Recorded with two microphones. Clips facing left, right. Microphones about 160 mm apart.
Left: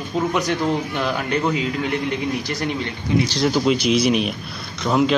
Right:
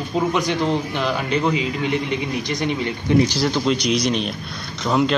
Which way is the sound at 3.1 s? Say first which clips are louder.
Right 4 dB; 60° right (ahead or behind).